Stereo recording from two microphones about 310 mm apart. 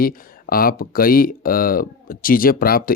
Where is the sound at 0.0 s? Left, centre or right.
Left.